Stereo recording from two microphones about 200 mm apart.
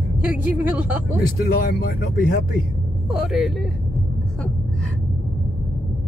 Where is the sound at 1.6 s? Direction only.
50° left (ahead or behind).